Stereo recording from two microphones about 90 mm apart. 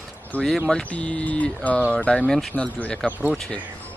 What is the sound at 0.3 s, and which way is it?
Speech, 20° left (ahead or behind).